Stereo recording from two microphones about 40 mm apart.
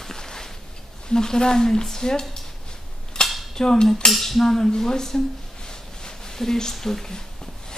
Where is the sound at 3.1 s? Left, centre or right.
Centre.